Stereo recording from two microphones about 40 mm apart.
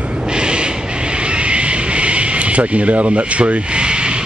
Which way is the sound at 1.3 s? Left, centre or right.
Right.